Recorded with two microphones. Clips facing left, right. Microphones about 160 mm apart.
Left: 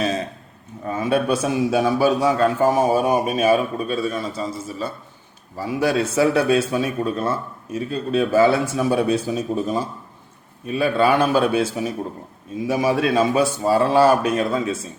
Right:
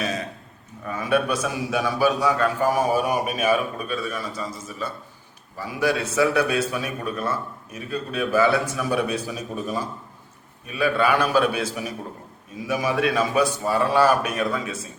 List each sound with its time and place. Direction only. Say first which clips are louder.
0.9 s a man's voice: left 3 dB; 30° left (ahead or behind)